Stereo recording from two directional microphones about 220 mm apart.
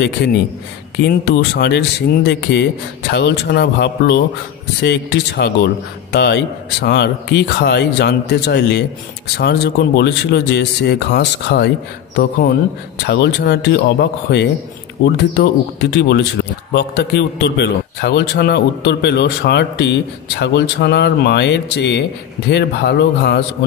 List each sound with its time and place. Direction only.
0.9 s a man's voice: 50° left (ahead or behind)